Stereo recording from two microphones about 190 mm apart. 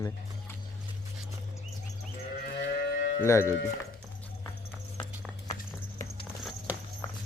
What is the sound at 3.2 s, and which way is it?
Speech, 15° left (ahead or behind).